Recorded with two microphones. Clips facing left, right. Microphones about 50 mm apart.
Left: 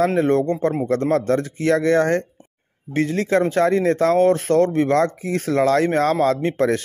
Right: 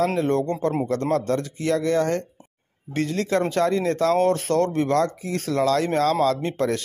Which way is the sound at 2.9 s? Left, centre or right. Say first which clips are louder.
Left 4 dB; left.